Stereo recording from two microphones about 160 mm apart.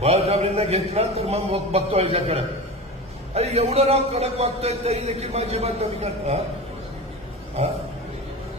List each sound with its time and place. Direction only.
0.0 s speech: 40° right (ahead or behind)